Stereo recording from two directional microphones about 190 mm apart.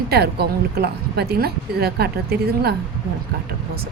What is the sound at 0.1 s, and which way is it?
A woman's voice, 55° right (ahead or behind).